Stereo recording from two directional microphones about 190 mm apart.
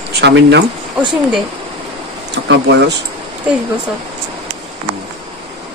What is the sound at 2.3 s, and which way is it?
Speech, 65° right (ahead or behind).